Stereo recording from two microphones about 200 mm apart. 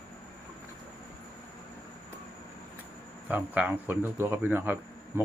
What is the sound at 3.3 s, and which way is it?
Speech, 10° right (ahead or behind).